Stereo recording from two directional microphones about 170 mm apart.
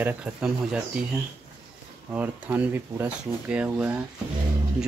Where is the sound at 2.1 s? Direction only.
10° right (ahead or behind).